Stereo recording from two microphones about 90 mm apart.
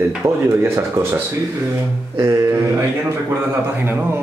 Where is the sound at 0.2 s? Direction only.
30° right (ahead or behind).